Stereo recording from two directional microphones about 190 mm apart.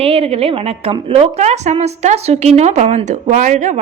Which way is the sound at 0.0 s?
30° right (ahead or behind).